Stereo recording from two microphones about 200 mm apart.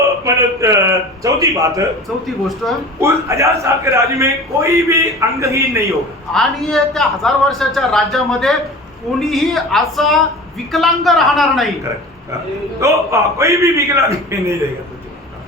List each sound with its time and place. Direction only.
0.0 s a man's voice: 15° right (ahead or behind)
2.6 s speech: centre (ahead or behind)
3.0 s a man's voice: 15° right (ahead or behind)
6.3 s speech: centre (ahead or behind)
12.8 s a man's voice: 15° right (ahead or behind)